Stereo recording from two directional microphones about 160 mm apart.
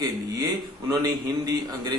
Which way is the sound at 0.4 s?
25° right (ahead or behind).